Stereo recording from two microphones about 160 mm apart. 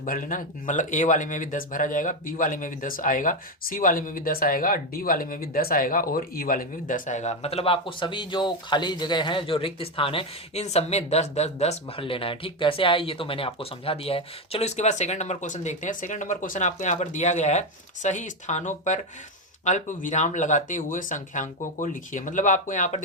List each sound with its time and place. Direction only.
0.0 s speech: 55° left (ahead or behind)